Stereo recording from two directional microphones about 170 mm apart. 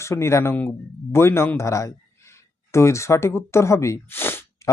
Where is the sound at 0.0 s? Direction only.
15° left (ahead or behind).